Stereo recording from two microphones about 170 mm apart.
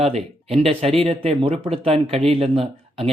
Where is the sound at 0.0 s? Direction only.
35° right (ahead or behind).